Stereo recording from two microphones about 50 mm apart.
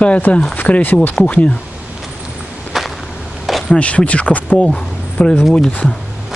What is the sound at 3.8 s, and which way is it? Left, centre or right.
Speech, left.